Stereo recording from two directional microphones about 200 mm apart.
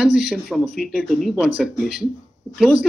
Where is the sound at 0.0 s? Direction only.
Centre (ahead or behind).